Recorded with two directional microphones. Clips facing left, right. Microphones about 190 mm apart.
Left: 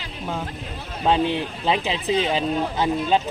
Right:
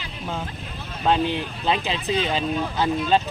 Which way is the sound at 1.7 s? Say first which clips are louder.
Left 2 dB; 20° left (ahead or behind).